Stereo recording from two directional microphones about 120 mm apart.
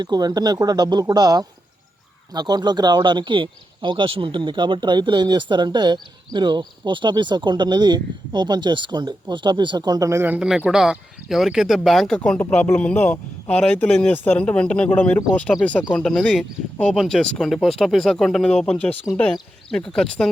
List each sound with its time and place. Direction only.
0.0 s speech: 35° right (ahead or behind)
10.3 s speech: 10° right (ahead or behind)